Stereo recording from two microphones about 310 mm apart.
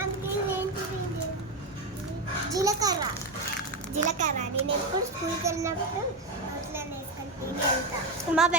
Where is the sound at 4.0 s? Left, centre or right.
Right.